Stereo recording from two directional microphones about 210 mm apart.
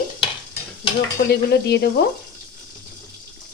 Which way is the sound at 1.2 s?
50° left (ahead or behind).